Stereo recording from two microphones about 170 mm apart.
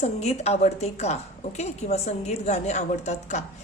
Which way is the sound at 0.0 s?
40° left (ahead or behind).